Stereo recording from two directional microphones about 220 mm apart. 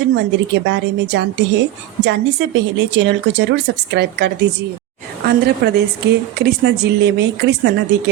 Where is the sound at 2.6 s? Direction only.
50° right (ahead or behind).